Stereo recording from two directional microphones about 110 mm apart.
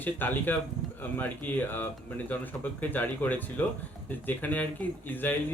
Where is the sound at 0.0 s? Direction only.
15° left (ahead or behind).